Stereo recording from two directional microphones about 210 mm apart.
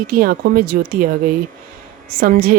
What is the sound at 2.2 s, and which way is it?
Speech, 45° right (ahead or behind).